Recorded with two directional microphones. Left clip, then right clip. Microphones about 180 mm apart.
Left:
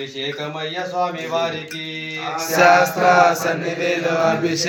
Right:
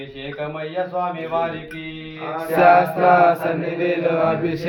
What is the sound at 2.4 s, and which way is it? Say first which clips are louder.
Mantra: even; 45° right (ahead or behind).